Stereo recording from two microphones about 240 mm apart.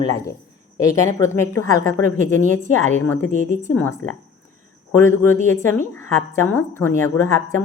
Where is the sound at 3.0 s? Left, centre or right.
Centre.